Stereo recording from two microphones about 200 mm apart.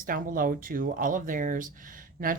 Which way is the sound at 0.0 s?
45° right (ahead or behind).